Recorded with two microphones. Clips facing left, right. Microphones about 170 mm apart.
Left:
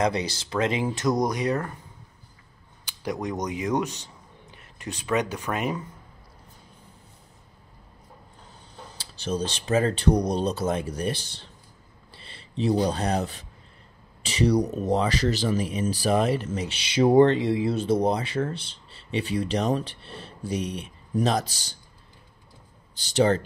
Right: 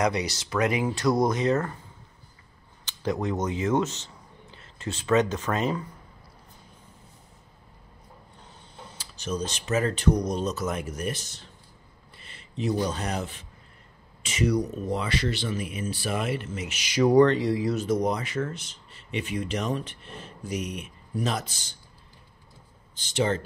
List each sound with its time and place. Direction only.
0.0 s speech: 30° left (ahead or behind); by 1.7 s 15° left (ahead or behind)
2.8 s speech: 15° left (ahead or behind)
8.5 s speech: 30° left (ahead or behind)
12.2 s a sound: 30° left (ahead or behind)
12.8 s speech: 35° left (ahead or behind)
22.9 s speech: 40° left (ahead or behind)